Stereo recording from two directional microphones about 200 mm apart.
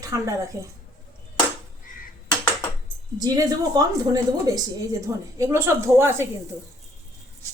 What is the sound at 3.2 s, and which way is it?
A woman's voice, 20° right (ahead or behind).